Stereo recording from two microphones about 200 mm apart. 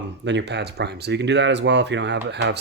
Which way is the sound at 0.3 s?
60° right (ahead or behind).